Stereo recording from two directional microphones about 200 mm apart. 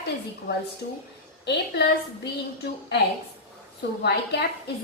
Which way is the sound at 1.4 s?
55° left (ahead or behind).